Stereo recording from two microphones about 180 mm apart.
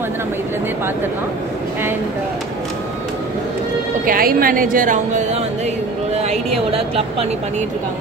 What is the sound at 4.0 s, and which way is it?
Speech, 50° right (ahead or behind).